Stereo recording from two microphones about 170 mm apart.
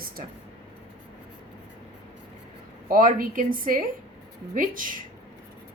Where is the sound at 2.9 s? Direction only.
55° right (ahead or behind).